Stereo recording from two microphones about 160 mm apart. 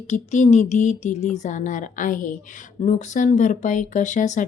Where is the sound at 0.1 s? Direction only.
45° left (ahead or behind).